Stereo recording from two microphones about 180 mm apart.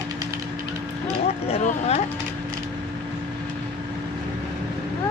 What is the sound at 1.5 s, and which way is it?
Speech, 35° left (ahead or behind).